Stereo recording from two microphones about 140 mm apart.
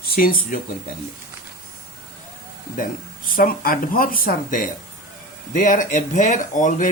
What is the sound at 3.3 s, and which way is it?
Speech, 90° left.